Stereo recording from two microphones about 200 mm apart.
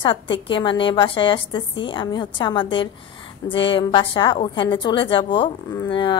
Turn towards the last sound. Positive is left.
turn(degrees=25)  # may be behind; listen again after turning